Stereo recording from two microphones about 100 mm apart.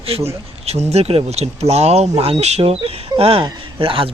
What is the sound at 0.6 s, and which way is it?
Speech, 90° right.